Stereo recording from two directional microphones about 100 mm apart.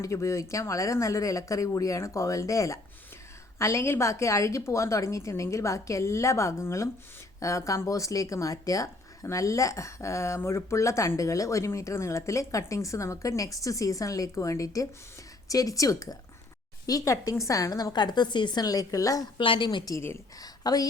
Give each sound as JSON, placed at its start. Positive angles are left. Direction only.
{"t": 0.0, "sound": "a woman's voice", "side_deg": 30}
{"t": 19.4, "sound": "a woman's voice", "side_deg": 55}
{"t": 20.4, "sound": "a woman's voice", "side_deg": 40}